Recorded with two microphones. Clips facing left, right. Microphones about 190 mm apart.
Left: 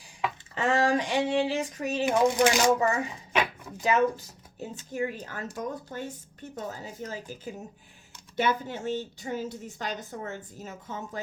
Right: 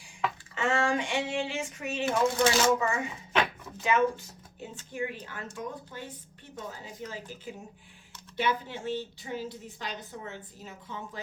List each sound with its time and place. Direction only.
0.5 s speech: 35° left (ahead or behind)
2.0 s speech: 15° left (ahead or behind)
2.8 s a woman's voice: 35° left (ahead or behind)